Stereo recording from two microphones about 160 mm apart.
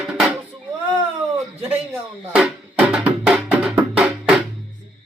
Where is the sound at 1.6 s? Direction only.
10° right (ahead or behind).